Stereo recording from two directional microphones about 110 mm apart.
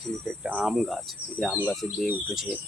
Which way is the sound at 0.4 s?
Centre (ahead or behind).